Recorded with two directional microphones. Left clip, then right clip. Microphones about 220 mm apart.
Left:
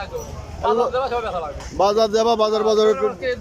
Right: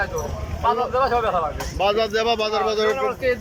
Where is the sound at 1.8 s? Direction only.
25° left (ahead or behind).